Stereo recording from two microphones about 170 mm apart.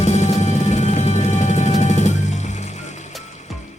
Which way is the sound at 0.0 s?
40° left (ahead or behind).